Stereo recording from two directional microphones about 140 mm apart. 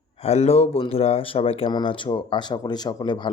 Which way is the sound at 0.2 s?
50° left (ahead or behind).